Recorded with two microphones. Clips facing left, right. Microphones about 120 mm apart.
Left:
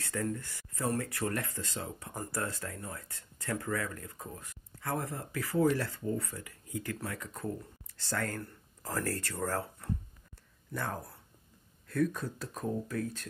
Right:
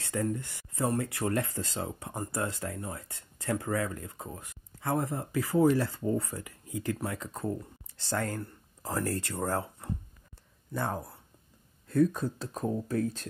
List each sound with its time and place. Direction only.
0.0 s speech: 20° right (ahead or behind)